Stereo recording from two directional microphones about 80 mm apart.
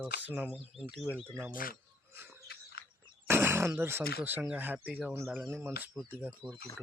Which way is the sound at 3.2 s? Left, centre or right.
Right.